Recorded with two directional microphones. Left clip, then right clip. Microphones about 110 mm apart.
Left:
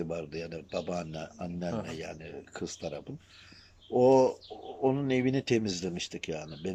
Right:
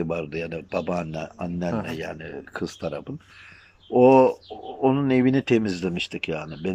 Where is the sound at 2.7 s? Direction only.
15° left (ahead or behind).